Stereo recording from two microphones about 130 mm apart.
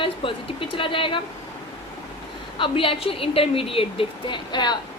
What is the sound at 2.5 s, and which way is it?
A woman's voice, 40° left (ahead or behind).